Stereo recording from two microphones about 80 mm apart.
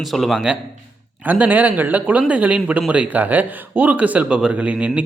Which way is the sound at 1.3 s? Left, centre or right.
Right.